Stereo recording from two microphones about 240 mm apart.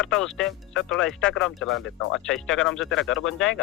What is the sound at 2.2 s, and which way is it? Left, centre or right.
A man's voice, centre.